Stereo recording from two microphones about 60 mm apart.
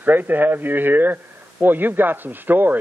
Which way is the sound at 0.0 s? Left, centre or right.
Right.